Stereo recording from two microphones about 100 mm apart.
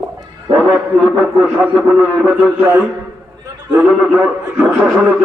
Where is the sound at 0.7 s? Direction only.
15° right (ahead or behind).